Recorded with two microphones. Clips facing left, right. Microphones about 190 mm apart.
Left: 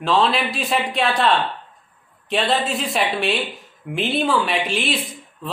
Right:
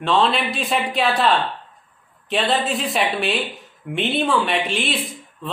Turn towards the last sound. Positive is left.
turn(degrees=0)  # may be behind; listen again after turning